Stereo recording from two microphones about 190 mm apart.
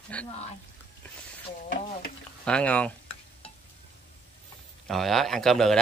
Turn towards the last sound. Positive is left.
turn(degrees=0)  # may be behind; listen again after turning